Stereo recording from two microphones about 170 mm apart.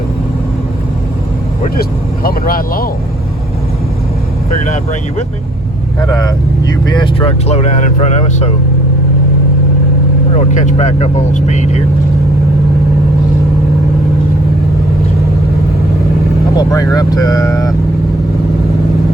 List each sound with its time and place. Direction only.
1.6 s speech: 60° left (ahead or behind)
4.6 s speech: 40° left (ahead or behind)
6.8 s speech: 30° left (ahead or behind)
10.3 s speech: 45° left (ahead or behind)
16.6 s speech: 20° left (ahead or behind)